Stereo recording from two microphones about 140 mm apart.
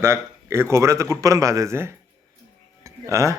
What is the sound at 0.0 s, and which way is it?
A man's voice, 20° right (ahead or behind).